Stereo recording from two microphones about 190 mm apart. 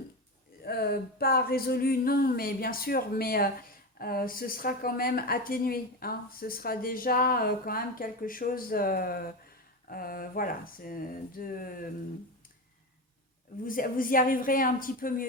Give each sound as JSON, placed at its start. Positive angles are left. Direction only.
{"t": 0.6, "sound": "a woman's voice", "side_deg": 55}
{"t": 13.7, "sound": "a woman's voice", "side_deg": 45}